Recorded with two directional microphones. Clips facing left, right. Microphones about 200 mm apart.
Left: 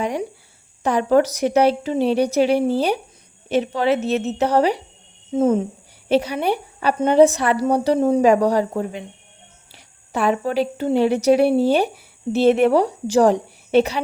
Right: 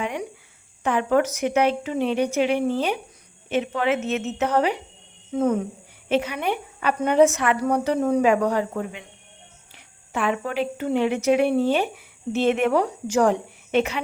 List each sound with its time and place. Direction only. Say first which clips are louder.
0.0 s a woman's voice: left 5 dB; 35° left (ahead or behind)
6.1 s a woman's voice: left 4 dB; 35° left (ahead or behind)